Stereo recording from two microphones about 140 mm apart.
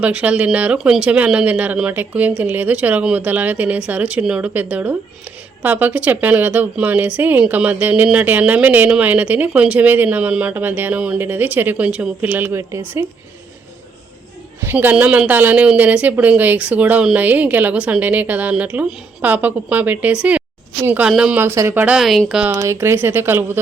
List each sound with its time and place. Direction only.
0.0 s speech: 10° right (ahead or behind)
14.6 s speech: 15° right (ahead or behind)
21.9 s speech: centre (ahead or behind)
22.5 s speech: 20° right (ahead or behind)